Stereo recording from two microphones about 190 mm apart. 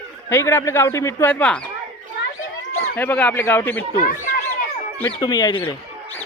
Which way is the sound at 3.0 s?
10° left (ahead or behind).